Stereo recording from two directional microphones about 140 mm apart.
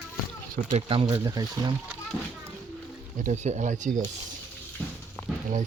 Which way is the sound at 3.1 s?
60° right (ahead or behind).